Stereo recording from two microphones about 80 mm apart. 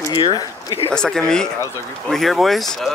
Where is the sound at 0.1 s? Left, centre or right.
Left.